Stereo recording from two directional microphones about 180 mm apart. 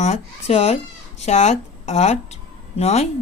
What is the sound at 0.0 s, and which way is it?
Speech, 40° left (ahead or behind).